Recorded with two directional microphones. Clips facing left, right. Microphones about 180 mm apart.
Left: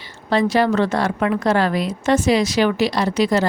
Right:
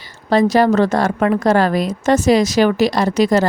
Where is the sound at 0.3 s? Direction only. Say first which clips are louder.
Right 4 dB; 40° right (ahead or behind).